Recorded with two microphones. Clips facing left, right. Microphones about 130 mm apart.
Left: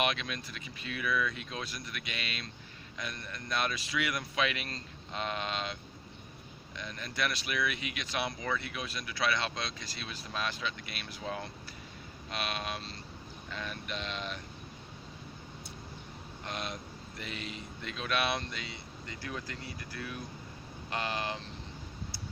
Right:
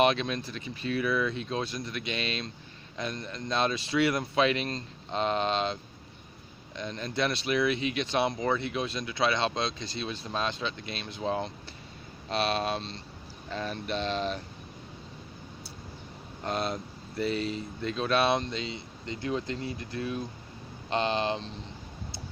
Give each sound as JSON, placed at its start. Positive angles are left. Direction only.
{"t": 0.0, "sound": "speech", "side_deg": -30}
{"t": 12.3, "sound": "a sound", "side_deg": -30}
{"t": 16.4, "sound": "speech", "side_deg": -35}